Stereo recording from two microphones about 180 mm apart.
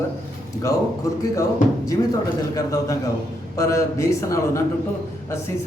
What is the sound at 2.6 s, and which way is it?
A man's voice, 20° left (ahead or behind).